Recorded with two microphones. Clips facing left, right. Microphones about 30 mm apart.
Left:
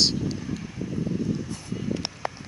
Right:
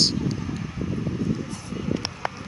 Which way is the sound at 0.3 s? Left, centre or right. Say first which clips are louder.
Right 2 dB; centre.